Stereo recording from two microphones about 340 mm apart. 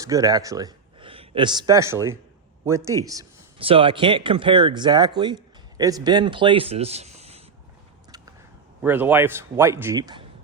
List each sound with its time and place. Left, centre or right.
0.0 s a man's voice: centre
8.8 s a man's voice: centre